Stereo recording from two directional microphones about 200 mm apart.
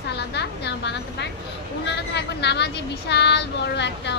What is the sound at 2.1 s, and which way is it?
A woman's voice, 55° left (ahead or behind).